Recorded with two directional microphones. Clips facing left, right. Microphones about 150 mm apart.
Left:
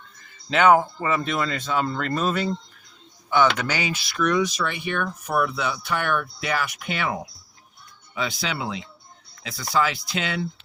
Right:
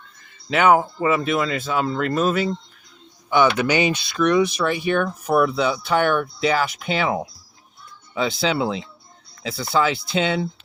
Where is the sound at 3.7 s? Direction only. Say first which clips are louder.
Right 7 dB; 20° right (ahead or behind).